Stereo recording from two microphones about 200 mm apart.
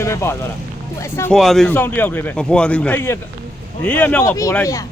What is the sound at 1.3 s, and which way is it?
A man's voice, centre (ahead or behind).